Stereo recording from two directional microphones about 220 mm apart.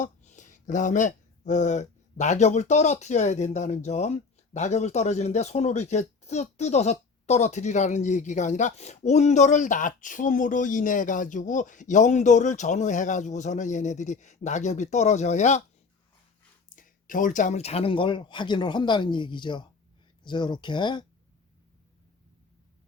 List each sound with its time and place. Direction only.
0.0 s speech: 35° left (ahead or behind)
16.6 s speech: 35° left (ahead or behind); by 21.0 s 20° left (ahead or behind)